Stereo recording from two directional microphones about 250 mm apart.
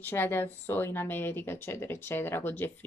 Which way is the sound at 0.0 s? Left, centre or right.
Centre.